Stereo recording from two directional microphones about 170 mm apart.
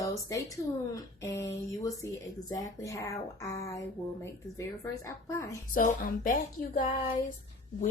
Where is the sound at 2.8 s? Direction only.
20° left (ahead or behind).